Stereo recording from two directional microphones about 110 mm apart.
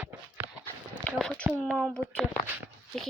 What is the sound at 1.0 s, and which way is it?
Speech, 10° left (ahead or behind).